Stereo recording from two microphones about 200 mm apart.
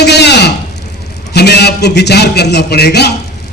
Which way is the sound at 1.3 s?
55° left (ahead or behind).